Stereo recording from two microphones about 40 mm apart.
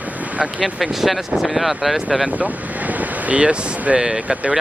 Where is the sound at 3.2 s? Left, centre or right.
Right; by 4.5 s centre.